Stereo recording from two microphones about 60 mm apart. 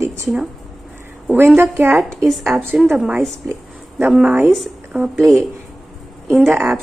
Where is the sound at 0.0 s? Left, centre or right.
Right.